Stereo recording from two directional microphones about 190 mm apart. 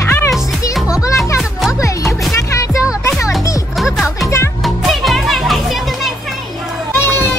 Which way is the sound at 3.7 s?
Centre (ahead or behind).